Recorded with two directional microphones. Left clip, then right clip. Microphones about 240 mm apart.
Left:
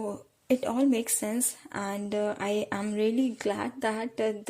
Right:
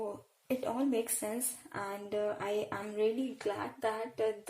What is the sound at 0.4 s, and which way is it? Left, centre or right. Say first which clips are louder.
A woman's voice: left 8 dB; left.